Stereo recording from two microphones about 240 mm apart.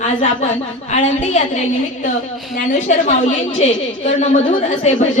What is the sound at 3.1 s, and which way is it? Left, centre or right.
A woman's voice, left.